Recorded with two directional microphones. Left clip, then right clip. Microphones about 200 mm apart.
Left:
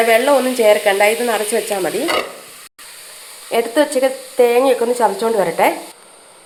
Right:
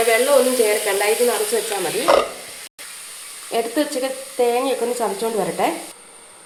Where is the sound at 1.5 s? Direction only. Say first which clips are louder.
Left 3 dB; 45° left (ahead or behind).